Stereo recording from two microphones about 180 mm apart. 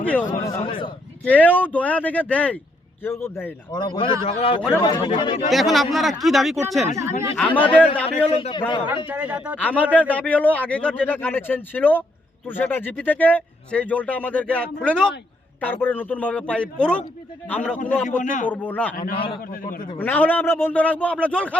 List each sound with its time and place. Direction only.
0.0 s a man's voice: 5° left (ahead or behind)
0.6 s a man's voice: 30° left (ahead or behind)
1.2 s speech: 10° left (ahead or behind)
3.7 s a man's voice: 25° left (ahead or behind)
5.5 s speech: centre (ahead or behind)
6.8 s speech: 15° right (ahead or behind)
7.3 s speech: 10° left (ahead or behind)
8.0 s a man's voice: 35° left (ahead or behind)
9.0 s speech: 10° right (ahead or behind)
9.6 s speech: 10° left (ahead or behind)
18.2 s a man's voice: 45° left (ahead or behind)
18.4 s speech: 10° left (ahead or behind)
18.9 s a man's voice: 50° left (ahead or behind)
20.0 s speech: 10° left (ahead or behind)